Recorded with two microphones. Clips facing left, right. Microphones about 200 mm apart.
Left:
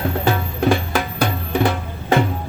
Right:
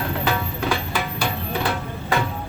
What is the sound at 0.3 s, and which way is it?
Music, 50° left (ahead or behind).